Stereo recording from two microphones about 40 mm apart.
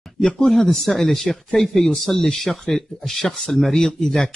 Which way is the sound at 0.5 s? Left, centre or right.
Centre.